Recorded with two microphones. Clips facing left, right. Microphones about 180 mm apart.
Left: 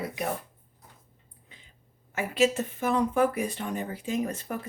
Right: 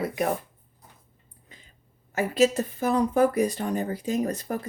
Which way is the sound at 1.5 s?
40° right (ahead or behind).